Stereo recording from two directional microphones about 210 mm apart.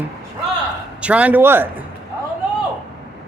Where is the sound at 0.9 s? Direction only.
5° right (ahead or behind).